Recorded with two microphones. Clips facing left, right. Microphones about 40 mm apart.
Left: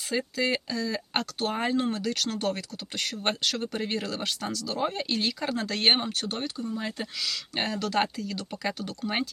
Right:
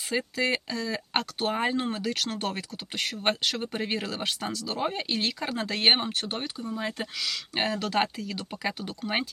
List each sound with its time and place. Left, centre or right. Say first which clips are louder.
0.1 s speech: even; right